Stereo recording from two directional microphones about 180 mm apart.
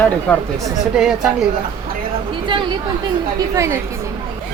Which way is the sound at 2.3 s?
25° right (ahead or behind).